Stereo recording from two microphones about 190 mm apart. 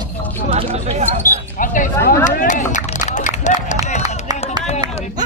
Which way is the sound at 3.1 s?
40° left (ahead or behind).